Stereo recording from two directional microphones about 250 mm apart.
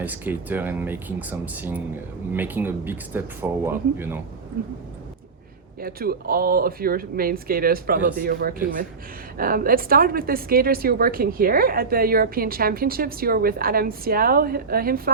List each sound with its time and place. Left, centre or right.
0.0 s speech: centre
5.8 s a woman's voice: right